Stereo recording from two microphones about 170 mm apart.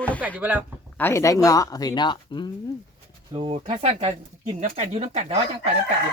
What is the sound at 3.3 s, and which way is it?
Speech, 30° right (ahead or behind).